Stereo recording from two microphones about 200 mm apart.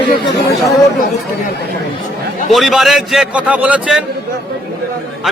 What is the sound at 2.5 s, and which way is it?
A man's voice, centre (ahead or behind).